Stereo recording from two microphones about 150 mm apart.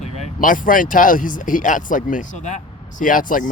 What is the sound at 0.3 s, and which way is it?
Speech, 65° left (ahead or behind).